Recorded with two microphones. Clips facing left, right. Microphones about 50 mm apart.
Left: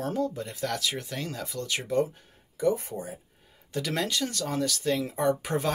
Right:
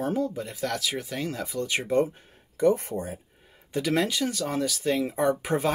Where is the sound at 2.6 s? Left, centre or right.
Right.